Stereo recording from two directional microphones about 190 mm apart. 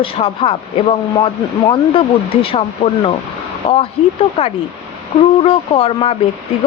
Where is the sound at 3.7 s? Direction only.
35° left (ahead or behind).